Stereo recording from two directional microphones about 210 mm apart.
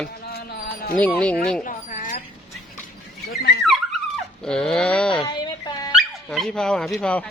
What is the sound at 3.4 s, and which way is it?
Dog, 55° left (ahead or behind).